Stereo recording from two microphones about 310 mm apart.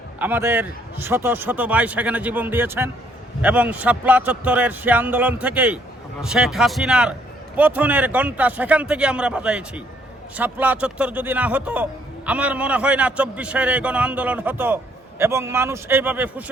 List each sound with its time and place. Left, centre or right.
0.2 s a man's voice: centre